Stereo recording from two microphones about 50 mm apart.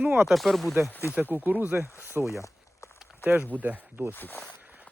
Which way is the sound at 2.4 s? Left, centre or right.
Left.